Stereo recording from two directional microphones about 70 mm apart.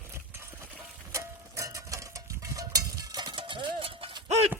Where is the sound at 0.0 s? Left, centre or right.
Right.